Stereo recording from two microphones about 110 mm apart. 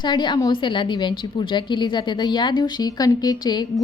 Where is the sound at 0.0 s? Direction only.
45° left (ahead or behind).